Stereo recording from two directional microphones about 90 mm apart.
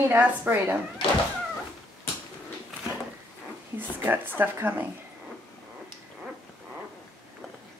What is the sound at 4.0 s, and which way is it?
Speech, 20° right (ahead or behind).